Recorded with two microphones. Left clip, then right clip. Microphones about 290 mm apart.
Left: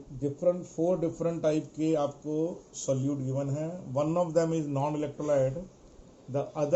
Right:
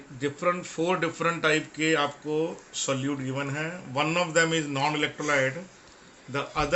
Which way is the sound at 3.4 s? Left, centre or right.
Right.